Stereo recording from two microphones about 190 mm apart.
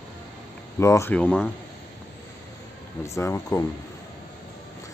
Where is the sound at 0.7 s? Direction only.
15° left (ahead or behind).